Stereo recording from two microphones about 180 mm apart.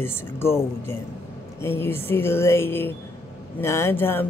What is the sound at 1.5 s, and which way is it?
Speech, 15° left (ahead or behind).